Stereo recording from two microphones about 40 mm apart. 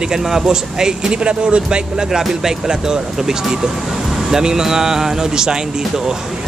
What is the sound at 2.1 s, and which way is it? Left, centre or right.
Speech, centre.